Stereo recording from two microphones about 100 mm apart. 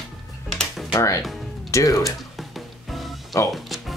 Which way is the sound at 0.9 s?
30° left (ahead or behind).